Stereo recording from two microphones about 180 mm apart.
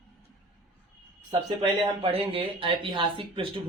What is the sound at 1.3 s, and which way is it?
Speech, 30° right (ahead or behind).